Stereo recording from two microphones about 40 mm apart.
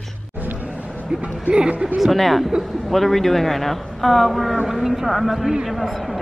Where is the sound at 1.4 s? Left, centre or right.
Right.